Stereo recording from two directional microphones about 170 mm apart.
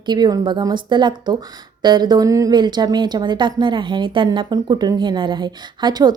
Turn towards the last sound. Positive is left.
turn(degrees=-25)  # may be behind; listen again after turning